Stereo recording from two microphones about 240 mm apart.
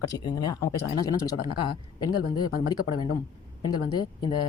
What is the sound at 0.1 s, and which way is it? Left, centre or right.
Speech, centre.